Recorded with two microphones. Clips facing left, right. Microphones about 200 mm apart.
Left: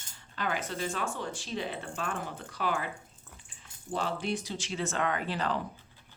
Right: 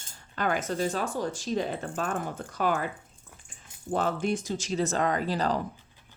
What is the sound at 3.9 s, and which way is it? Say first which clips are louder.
Speech: right 5 dB; 45° right (ahead or behind).